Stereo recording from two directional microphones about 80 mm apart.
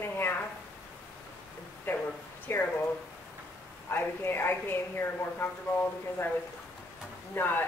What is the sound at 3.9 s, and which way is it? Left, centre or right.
Speech, left.